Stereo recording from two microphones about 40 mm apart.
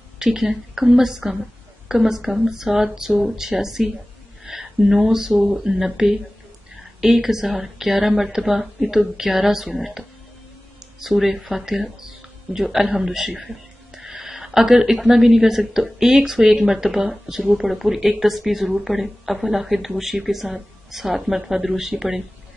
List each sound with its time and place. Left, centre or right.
0.2 s speech: centre